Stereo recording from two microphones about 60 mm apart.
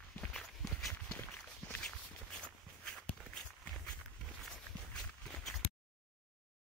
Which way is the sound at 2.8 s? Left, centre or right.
Centre.